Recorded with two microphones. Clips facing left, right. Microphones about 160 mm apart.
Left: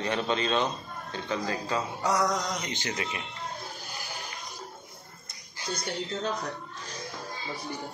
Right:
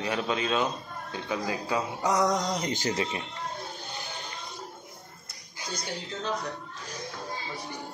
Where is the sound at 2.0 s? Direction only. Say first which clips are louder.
Right 2 dB; 20° right (ahead or behind).